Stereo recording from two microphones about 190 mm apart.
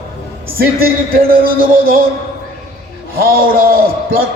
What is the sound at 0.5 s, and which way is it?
A man's voice, 50° right (ahead or behind).